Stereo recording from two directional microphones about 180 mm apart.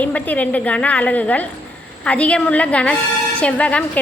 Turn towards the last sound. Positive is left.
turn(degrees=5)  # may be behind; listen again after turning